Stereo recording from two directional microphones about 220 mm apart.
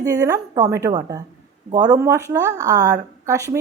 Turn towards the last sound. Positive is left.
turn(degrees=-15)  # may be behind; listen again after turning